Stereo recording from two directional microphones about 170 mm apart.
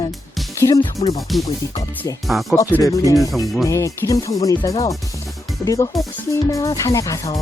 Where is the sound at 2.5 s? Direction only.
20° left (ahead or behind).